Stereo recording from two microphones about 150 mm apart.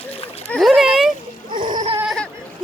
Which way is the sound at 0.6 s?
Centre (ahead or behind).